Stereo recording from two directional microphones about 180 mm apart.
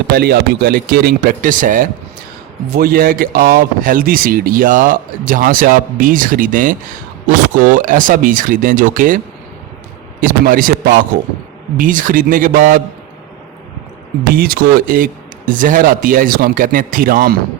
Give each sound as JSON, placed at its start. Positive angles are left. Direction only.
{"t": 0.1, "sound": "speech", "side_deg": -60}
{"t": 14.3, "sound": "speech", "side_deg": -55}